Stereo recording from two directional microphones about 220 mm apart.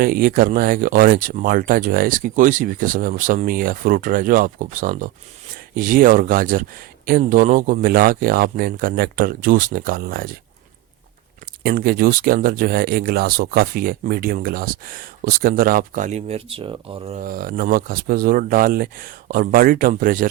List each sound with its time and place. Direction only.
0.0 s speech: 40° right (ahead or behind)
11.6 s speech: 40° right (ahead or behind); by 17.2 s 25° right (ahead or behind)
17.2 s speech: 40° right (ahead or behind)